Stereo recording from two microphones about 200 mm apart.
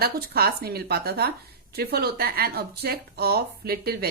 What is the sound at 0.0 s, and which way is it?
A woman's voice, 50° right (ahead or behind).